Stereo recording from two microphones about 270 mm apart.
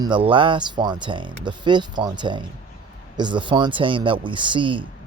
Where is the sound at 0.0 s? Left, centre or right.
Centre.